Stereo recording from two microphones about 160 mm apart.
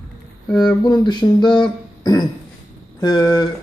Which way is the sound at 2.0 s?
25° left (ahead or behind).